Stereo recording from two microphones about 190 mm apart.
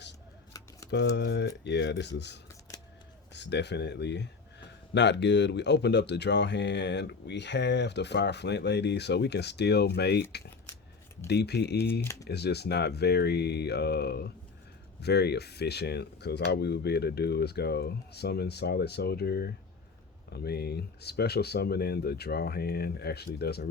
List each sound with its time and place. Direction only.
0.9 s speech: 65° left (ahead or behind)
11.3 s speech: 60° left (ahead or behind)